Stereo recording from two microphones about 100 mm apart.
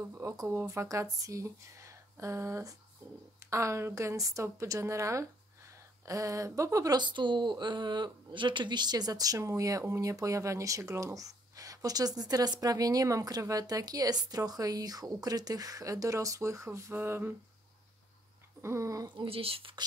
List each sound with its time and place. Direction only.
0.1 s speech: 30° right (ahead or behind)
7.0 s speech: 50° right (ahead or behind); by 17.3 s 20° right (ahead or behind)
18.6 s speech: 30° right (ahead or behind)
19.2 s speech: 70° right (ahead or behind)